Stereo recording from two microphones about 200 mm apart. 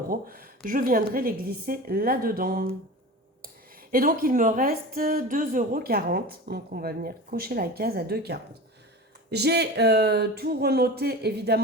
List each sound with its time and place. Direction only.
0.1 s speech: 45° right (ahead or behind)
3.9 s speech: 45° right (ahead or behind)